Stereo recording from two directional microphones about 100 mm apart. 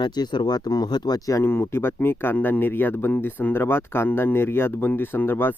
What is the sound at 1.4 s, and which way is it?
Speech, 25° left (ahead or behind).